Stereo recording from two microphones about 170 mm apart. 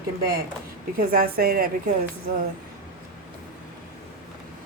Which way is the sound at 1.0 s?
60° right (ahead or behind).